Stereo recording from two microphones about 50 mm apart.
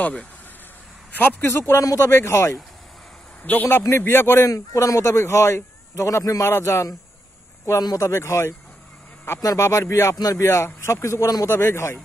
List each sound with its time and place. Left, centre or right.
1.4 s speech: left
3.4 s a man's voice: left
4.0 s speech: left